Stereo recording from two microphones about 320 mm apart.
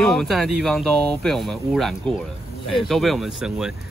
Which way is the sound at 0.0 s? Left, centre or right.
Centre.